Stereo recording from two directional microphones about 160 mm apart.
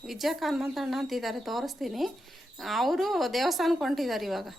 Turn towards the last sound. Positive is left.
turn(degrees=0)  # may be behind; listen again after turning